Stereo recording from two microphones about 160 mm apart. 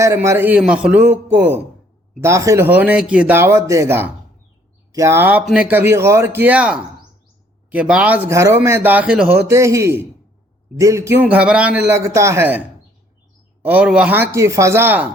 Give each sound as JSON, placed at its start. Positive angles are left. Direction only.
{"t": 0.0, "sound": "a man's voice", "side_deg": -20}
{"t": 13.7, "sound": "a man's voice", "side_deg": -10}